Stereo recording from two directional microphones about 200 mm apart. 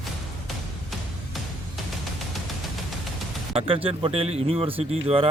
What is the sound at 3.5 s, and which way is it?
Speech, 25° right (ahead or behind).